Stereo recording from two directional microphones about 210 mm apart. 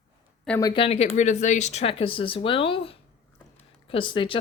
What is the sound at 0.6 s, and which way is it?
Speech, 25° left (ahead or behind).